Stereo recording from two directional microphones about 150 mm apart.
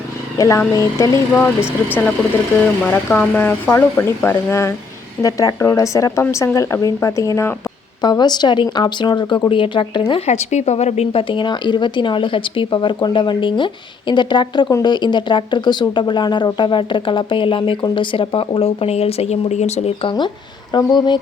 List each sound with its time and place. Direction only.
0.3 s speech: 20° left (ahead or behind)
2.8 s speech: 10° left (ahead or behind); by 21.2 s 30° left (ahead or behind)